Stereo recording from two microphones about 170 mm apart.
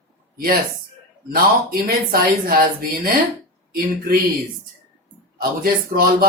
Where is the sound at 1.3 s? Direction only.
60° right (ahead or behind).